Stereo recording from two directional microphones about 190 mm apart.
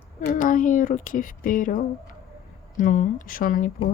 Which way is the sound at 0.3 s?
45° left (ahead or behind).